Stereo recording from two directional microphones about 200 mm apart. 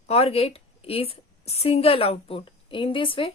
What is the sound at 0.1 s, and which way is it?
A woman's voice, 30° left (ahead or behind).